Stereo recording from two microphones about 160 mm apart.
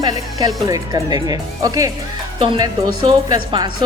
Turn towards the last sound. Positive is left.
turn(degrees=-30)  # may be behind; listen again after turning